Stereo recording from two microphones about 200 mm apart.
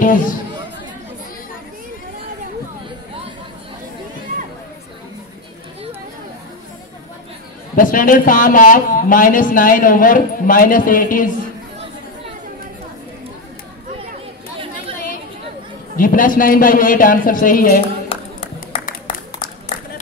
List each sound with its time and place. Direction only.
0.0 s speech: 40° left (ahead or behind)
7.7 s speech: 45° left (ahead or behind)
16.0 s speech: 45° left (ahead or behind)
18.0 s a sound: 25° left (ahead or behind)